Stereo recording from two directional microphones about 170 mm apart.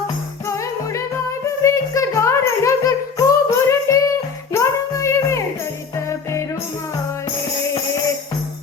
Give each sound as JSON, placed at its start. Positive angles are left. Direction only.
{"t": 0.4, "sound": "music", "side_deg": 15}